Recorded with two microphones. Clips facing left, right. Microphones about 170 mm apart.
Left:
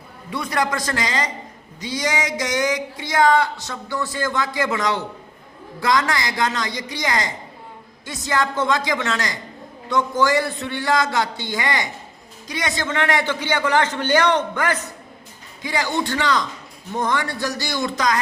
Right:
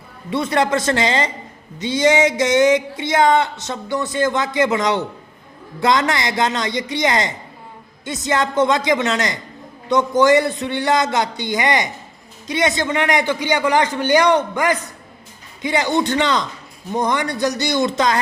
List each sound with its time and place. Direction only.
0.3 s a man's voice: 25° right (ahead or behind)